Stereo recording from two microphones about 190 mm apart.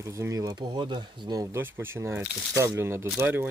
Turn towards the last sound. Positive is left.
turn(degrees=-10)  # may be behind; listen again after turning